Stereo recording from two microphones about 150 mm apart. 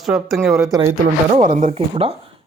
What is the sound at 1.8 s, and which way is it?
Speech, 40° right (ahead or behind).